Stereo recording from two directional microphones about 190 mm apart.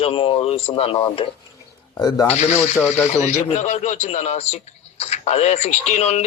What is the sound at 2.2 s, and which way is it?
Speech, 35° left (ahead or behind).